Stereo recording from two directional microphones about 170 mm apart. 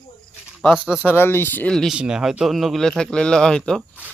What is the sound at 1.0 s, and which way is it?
Speech, 15° left (ahead or behind).